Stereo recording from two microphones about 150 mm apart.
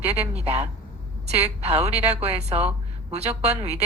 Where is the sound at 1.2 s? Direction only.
45° right (ahead or behind).